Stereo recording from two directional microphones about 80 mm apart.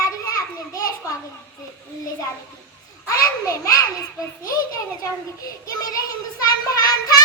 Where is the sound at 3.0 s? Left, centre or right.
Left.